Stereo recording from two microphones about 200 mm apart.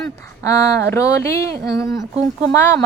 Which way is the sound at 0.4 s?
15° left (ahead or behind).